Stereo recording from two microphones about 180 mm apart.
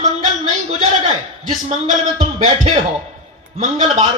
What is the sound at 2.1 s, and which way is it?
Speech, 35° right (ahead or behind).